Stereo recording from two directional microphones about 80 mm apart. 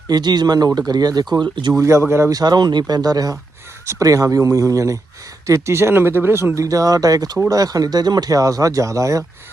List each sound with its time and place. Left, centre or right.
0.1 s speech: right
1.8 s speech: right
2.3 s speech: right